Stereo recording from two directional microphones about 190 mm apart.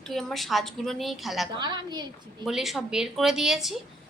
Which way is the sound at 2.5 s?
Centre (ahead or behind).